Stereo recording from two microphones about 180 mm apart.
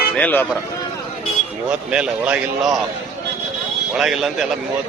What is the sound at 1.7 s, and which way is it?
A man's voice, 5° right (ahead or behind).